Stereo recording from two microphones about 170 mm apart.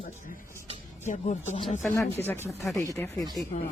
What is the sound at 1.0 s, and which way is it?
Speech, 45° left (ahead or behind).